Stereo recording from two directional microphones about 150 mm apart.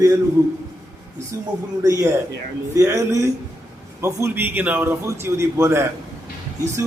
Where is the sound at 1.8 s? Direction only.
20° right (ahead or behind).